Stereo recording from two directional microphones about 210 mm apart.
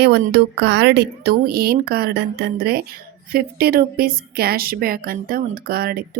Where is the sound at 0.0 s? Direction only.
50° right (ahead or behind).